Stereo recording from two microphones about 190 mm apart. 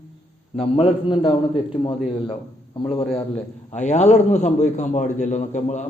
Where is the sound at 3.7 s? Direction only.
35° left (ahead or behind).